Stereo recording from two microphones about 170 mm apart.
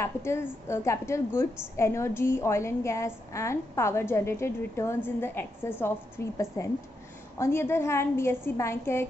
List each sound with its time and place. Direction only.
0.0 s a woman's voice: 15° left (ahead or behind)